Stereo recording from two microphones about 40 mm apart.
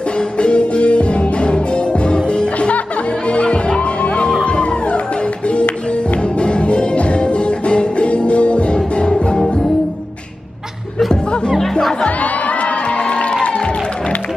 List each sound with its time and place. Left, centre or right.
0.4 s music: left
6.4 s music: left
12.0 s crowd: left